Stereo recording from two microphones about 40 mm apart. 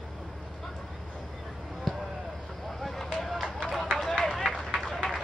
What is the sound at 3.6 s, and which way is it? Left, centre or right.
Run, centre.